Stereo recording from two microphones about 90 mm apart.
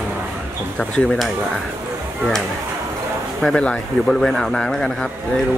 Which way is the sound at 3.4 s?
10° left (ahead or behind).